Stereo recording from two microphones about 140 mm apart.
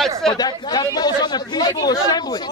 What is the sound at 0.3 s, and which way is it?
Speech, 30° left (ahead or behind).